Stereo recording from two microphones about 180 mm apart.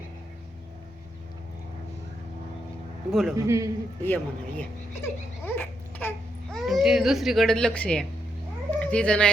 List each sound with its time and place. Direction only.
3.1 s a man's voice: centre (ahead or behind)
3.3 s a man's voice: 15° right (ahead or behind)
4.0 s speech: 10° left (ahead or behind)
5.5 s a sound: 10° left (ahead or behind)
6.5 s speech: centre (ahead or behind)